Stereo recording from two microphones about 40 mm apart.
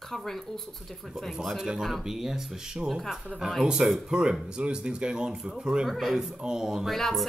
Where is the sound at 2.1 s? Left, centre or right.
Centre.